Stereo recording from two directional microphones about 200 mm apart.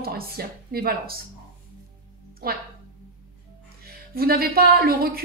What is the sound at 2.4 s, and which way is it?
Speech, 50° right (ahead or behind).